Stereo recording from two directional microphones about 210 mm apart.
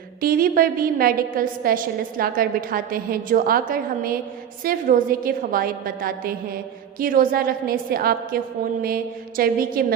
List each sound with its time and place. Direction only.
0.2 s a woman's voice: 45° right (ahead or behind)